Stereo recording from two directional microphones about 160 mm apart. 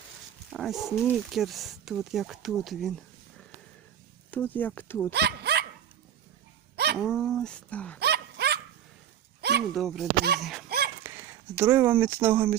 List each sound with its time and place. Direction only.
0.5 s speech: centre (ahead or behind)
4.3 s speech: 10° left (ahead or behind)
5.1 s dog: 90° right
6.9 s speech: 5° right (ahead or behind)
7.9 s dog: 90° right
9.7 s speech: centre (ahead or behind)
10.7 s a sound: 80° right
11.0 s speech: 15° right (ahead or behind)